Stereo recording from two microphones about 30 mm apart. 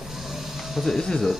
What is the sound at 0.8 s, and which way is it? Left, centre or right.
Speech, centre.